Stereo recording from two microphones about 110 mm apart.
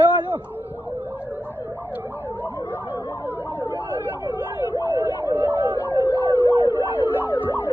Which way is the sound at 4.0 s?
20° right (ahead or behind).